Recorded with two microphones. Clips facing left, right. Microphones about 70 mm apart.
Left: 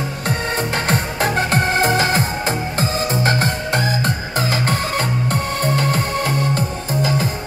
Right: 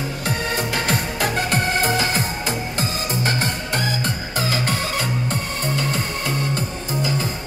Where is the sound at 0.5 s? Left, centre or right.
Left.